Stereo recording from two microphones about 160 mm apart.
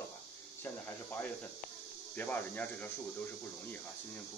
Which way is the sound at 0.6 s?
10° left (ahead or behind).